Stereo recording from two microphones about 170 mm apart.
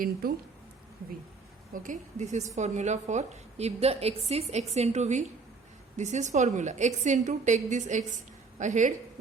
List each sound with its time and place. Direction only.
0.0 s speech: 60° right (ahead or behind)
1.7 s a woman's voice: 50° right (ahead or behind)